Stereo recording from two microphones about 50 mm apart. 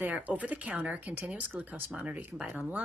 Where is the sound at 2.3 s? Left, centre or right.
Centre.